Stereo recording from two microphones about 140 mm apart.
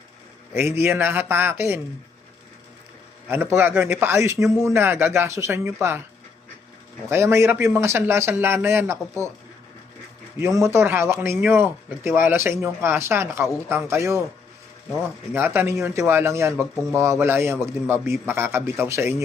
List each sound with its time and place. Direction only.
0.5 s a man's voice: 15° right (ahead or behind)
3.2 s a man's voice: 15° right (ahead or behind)
7.1 s a man's voice: 15° right (ahead or behind)
10.4 s a man's voice: 20° right (ahead or behind)
15.3 s a man's voice: 15° right (ahead or behind)